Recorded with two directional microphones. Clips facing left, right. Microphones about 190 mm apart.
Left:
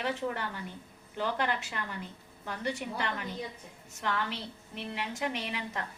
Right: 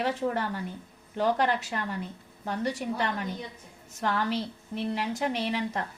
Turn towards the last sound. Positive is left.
turn(degrees=-35)  # may be behind; listen again after turning